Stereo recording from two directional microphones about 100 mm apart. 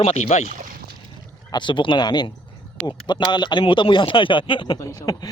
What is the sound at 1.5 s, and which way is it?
Speech, 50° left (ahead or behind).